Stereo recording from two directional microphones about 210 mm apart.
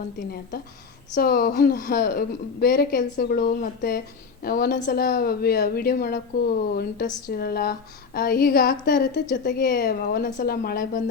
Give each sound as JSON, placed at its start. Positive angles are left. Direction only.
{"t": 1.1, "sound": "a woman's voice", "side_deg": 45}